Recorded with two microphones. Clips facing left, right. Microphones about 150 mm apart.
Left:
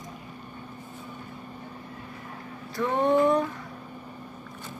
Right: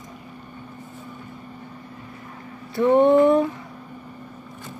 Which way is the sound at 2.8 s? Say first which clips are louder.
Right 7 dB; 30° right (ahead or behind).